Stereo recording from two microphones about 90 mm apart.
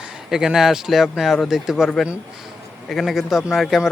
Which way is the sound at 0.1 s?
5° right (ahead or behind).